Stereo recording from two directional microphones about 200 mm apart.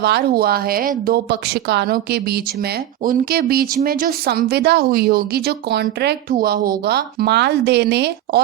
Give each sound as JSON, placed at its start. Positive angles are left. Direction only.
{"t": 0.0, "sound": "a woman's voice", "side_deg": -55}